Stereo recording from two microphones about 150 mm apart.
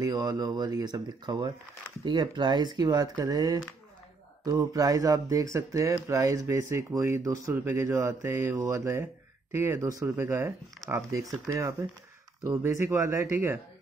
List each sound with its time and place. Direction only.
0.0 s speech: 25° right (ahead or behind)